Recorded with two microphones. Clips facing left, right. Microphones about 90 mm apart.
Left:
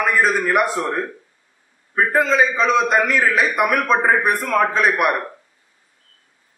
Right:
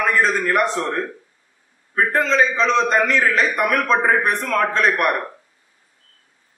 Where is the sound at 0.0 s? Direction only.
10° left (ahead or behind).